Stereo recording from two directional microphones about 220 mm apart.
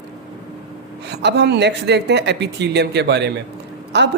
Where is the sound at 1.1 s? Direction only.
50° right (ahead or behind).